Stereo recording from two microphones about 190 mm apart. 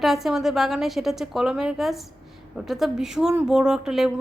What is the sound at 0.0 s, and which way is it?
A woman's voice, centre (ahead or behind).